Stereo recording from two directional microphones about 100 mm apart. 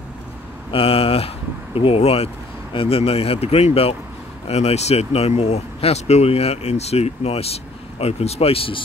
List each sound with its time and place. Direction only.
0.7 s speech: 70° left (ahead or behind); by 2.2 s 85° left
2.7 s speech: 70° left (ahead or behind)
4.5 s speech: 90° left; by 8.8 s 65° left (ahead or behind)